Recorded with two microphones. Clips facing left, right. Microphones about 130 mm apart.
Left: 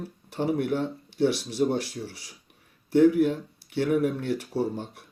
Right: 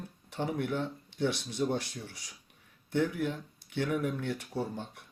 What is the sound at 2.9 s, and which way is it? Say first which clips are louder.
Speech: left 11 dB; 50° left (ahead or behind).